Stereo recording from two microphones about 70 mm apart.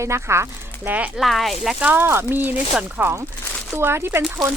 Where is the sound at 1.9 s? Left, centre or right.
Right.